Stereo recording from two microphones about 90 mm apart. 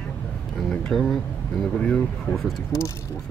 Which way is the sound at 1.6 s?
5° left (ahead or behind).